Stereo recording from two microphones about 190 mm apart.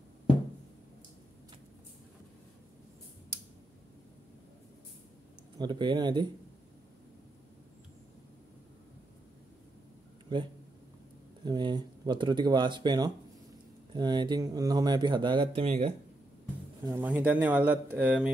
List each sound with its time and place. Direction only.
5.6 s speech: 25° right (ahead or behind)
11.4 s speech: 20° right (ahead or behind)
16.8 s speech: 10° right (ahead or behind)